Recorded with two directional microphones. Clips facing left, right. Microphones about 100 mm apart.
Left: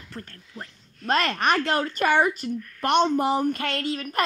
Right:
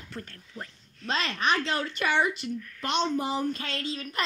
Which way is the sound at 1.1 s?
55° left (ahead or behind).